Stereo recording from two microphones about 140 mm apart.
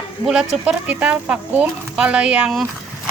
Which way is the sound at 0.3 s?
5° right (ahead or behind).